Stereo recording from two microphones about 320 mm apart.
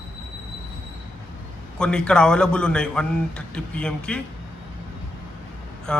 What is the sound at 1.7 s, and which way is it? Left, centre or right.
A man's voice, centre.